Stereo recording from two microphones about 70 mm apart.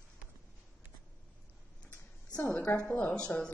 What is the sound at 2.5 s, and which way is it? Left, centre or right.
Speech, left.